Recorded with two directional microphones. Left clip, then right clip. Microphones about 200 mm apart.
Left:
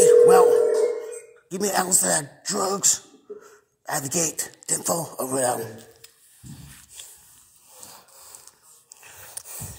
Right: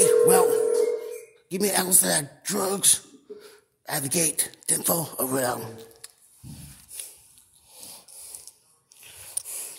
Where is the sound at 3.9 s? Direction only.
15° right (ahead or behind).